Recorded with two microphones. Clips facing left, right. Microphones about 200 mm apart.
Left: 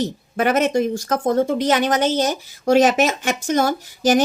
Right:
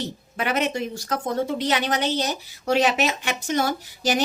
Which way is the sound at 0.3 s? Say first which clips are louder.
Left 7 dB; 45° left (ahead or behind).